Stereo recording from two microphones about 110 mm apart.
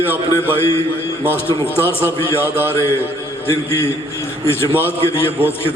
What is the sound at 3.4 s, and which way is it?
A man's voice, 20° left (ahead or behind).